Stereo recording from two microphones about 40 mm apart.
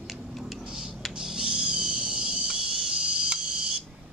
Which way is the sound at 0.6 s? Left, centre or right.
Right.